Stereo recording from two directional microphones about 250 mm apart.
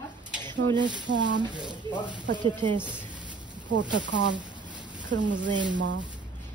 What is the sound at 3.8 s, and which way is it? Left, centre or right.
Speech, right.